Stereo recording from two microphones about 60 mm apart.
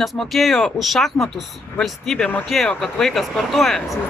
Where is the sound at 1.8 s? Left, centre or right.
Centre.